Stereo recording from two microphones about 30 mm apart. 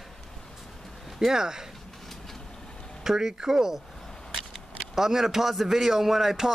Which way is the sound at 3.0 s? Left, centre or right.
Centre.